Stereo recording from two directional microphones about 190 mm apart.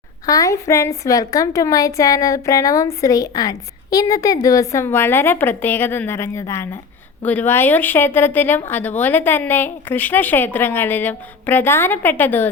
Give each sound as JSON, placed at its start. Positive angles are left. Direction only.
{"t": 0.3, "sound": "a woman's voice", "side_deg": 20}